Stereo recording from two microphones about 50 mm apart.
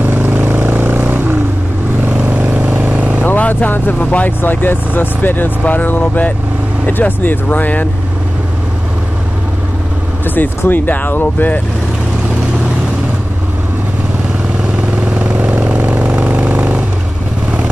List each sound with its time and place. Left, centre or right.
0.0 s vehicle: right
2.5 s vehicle: right
2.9 s vehicle: right
3.3 s vehicle: left
4.4 s speech: left
10.2 s speech: left
15.1 s vehicle: right